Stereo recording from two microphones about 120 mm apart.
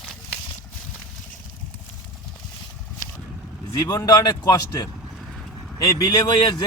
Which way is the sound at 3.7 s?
30° left (ahead or behind).